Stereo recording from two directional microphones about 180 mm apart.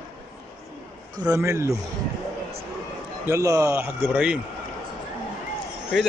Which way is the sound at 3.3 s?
15° right (ahead or behind).